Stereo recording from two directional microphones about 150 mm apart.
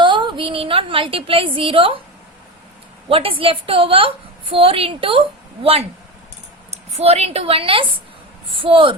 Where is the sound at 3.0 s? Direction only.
35° right (ahead or behind).